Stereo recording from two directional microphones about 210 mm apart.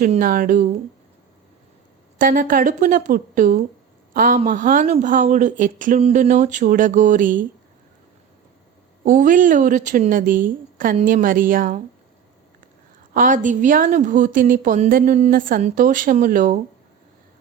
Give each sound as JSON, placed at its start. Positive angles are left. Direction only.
{"t": 0.0, "sound": "a woman's voice", "side_deg": -40}
{"t": 2.1, "sound": "a woman's voice", "side_deg": -40}
{"t": 9.0, "sound": "a woman's voice", "side_deg": -40}
{"t": 13.1, "sound": "a woman's voice", "side_deg": -40}